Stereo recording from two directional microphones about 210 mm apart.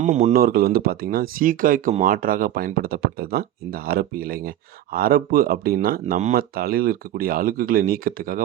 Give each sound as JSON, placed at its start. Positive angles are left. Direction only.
{"t": 0.0, "sound": "speech", "side_deg": -35}
{"t": 0.3, "sound": "speech", "side_deg": -45}